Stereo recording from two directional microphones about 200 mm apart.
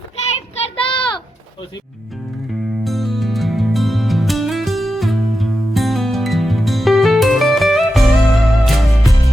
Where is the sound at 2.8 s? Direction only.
Centre (ahead or behind).